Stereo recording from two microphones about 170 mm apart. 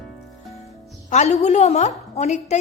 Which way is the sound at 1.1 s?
40° left (ahead or behind).